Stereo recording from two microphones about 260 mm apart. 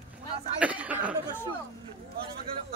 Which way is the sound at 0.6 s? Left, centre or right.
Centre.